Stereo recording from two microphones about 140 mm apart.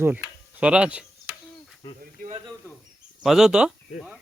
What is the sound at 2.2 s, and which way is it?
Speech, 80° right.